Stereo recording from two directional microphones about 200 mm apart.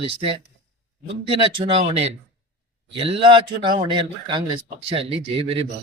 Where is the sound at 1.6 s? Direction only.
25° right (ahead or behind).